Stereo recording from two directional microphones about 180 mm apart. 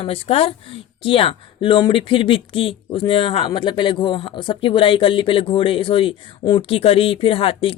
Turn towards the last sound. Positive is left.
turn(degrees=30)  # may be behind; listen again after turning